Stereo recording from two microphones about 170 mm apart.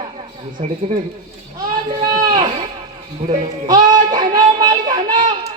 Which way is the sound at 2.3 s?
30° right (ahead or behind).